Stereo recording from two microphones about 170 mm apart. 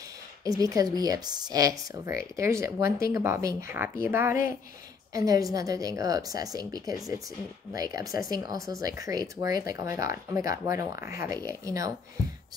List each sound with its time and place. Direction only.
0.5 s speech: 20° right (ahead or behind)